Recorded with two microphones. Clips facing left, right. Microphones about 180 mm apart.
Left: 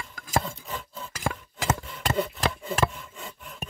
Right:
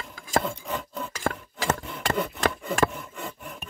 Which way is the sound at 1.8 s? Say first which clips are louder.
Even; 65° right (ahead or behind).